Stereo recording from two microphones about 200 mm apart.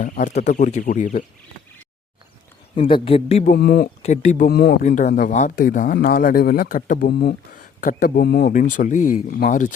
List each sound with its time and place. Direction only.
0.0 s speech: 40° left (ahead or behind)
2.7 s speech: 25° left (ahead or behind)
3.5 s speech: 50° left (ahead or behind)
4.0 s speech: 35° left (ahead or behind); by 8.5 s 55° left (ahead or behind)
8.5 s speech: 40° left (ahead or behind)